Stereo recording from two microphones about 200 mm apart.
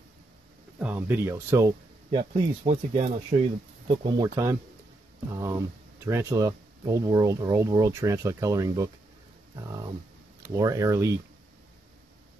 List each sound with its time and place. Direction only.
0.7 s speech: 10° right (ahead or behind)
2.1 s speech: 25° right (ahead or behind)